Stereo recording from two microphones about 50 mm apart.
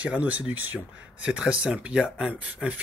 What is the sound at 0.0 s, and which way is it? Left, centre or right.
Speech, right.